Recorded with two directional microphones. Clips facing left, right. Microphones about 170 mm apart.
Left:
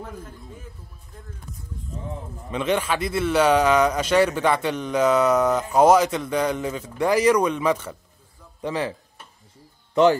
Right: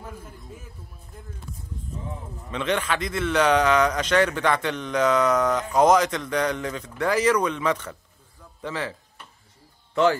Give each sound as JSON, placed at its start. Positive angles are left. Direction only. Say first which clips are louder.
{"t": 2.5, "sound": "a man's voice", "louder": "left 2 dB", "side_deg": 10}